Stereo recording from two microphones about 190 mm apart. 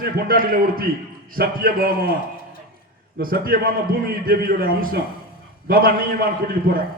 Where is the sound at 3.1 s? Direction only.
50° right (ahead or behind).